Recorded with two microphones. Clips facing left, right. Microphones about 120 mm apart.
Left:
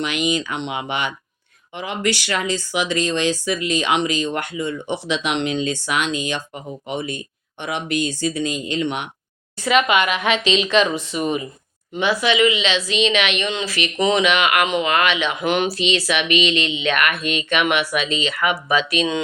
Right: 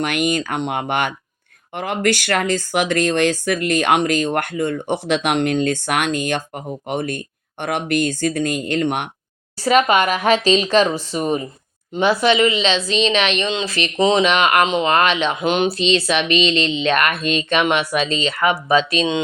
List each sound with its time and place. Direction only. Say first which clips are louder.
0.0 s speech: right 2 dB; 55° right (ahead or behind)
9.6 s speech: right 2 dB; 40° right (ahead or behind)